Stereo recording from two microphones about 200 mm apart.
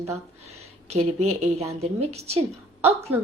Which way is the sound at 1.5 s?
30° right (ahead or behind).